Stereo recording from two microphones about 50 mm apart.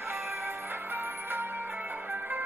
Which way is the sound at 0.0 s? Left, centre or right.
Right.